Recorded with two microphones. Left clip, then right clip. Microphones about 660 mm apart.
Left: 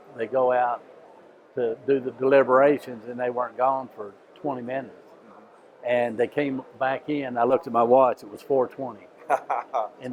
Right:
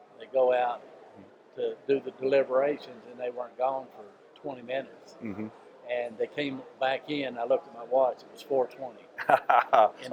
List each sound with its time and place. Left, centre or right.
0.2 s speech: left
5.8 s speech: left
7.5 s speech: left
8.5 s speech: left
9.2 s a man's voice: right